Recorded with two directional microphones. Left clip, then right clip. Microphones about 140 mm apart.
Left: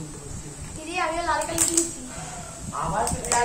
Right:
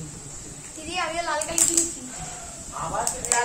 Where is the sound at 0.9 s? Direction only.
45° right (ahead or behind).